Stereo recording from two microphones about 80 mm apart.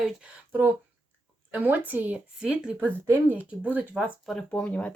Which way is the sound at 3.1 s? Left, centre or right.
Right.